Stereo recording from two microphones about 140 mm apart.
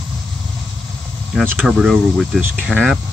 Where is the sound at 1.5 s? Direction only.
5° right (ahead or behind).